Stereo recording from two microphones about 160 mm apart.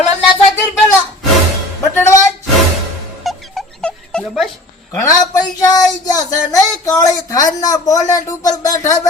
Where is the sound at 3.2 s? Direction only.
Centre (ahead or behind).